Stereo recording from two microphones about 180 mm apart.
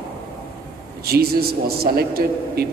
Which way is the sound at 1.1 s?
60° right (ahead or behind).